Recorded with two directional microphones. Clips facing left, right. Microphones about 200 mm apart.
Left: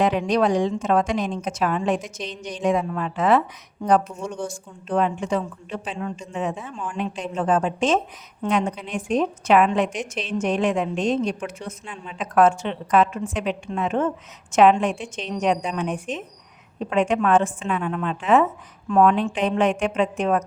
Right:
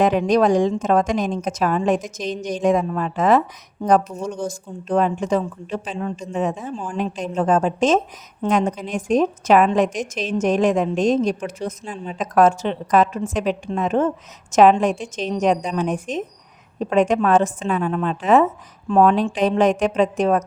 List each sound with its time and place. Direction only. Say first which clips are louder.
0.0 s a woman's voice: right 4 dB; 45° right (ahead or behind)